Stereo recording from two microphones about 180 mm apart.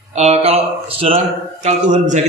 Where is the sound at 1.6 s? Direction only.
40° right (ahead or behind).